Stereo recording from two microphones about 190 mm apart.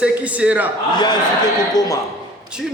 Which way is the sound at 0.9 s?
20° left (ahead or behind).